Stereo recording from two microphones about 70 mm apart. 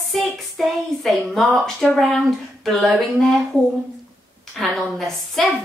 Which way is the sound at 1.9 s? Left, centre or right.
Centre.